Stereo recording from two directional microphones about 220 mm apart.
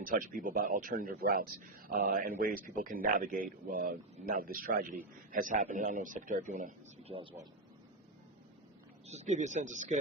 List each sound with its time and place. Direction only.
0.0 s a man's voice: 40° right (ahead or behind)
7.2 s speech: 25° right (ahead or behind)
9.0 s a man's voice: 30° right (ahead or behind)